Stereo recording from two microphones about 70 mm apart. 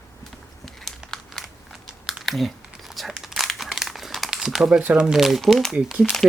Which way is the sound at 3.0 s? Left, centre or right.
Centre.